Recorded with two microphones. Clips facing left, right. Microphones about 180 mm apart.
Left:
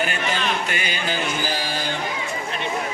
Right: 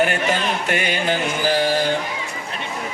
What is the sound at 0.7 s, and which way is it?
Music, 65° right (ahead or behind).